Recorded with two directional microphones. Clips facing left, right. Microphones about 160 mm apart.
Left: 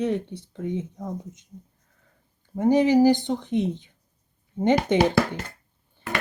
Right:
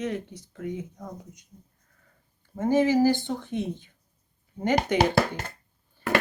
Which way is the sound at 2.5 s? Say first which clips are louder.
Left 3 dB; 15° left (ahead or behind).